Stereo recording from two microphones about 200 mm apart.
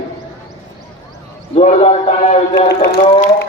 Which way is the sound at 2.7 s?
60° left (ahead or behind).